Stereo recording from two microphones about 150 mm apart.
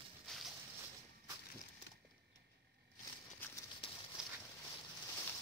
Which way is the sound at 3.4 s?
15° left (ahead or behind).